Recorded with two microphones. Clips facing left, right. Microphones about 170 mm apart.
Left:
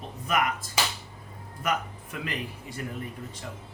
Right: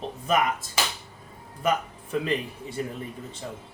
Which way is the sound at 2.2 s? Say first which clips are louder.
Right 6 dB; 25° right (ahead or behind).